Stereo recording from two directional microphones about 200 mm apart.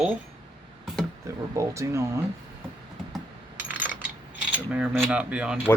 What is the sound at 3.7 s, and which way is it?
Coin, 10° right (ahead or behind).